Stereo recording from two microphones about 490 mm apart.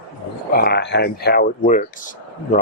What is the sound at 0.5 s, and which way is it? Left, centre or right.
Speech, centre.